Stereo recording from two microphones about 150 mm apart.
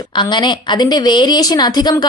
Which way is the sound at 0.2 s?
30° left (ahead or behind).